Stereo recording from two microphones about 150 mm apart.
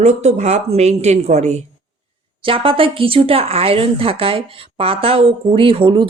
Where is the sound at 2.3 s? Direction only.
35° right (ahead or behind).